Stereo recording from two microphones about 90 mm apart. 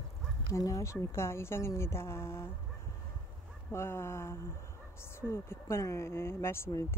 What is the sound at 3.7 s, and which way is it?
A woman's voice, 30° left (ahead or behind).